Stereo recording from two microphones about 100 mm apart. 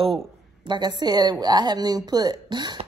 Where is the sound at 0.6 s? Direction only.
50° right (ahead or behind).